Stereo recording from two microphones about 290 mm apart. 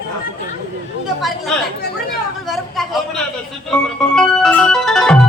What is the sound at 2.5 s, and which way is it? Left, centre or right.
Speech, centre.